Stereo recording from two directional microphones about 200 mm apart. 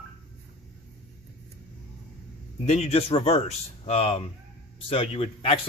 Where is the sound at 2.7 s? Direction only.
30° left (ahead or behind).